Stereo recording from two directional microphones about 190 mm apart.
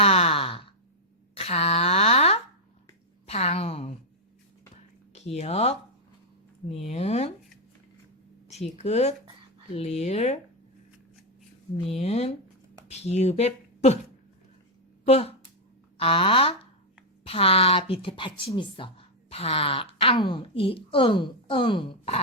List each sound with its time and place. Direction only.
0.0 s sigh: 30° left (ahead or behind)
1.4 s a sound: 35° left (ahead or behind)
6.7 s speech: 35° left (ahead or behind)
8.7 s speech: 35° left (ahead or behind)
11.9 s speech: 35° left (ahead or behind)
15.0 s speech: 35° left (ahead or behind)